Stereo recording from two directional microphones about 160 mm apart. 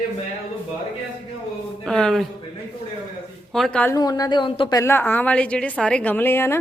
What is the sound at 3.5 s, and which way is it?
Speech, centre (ahead or behind).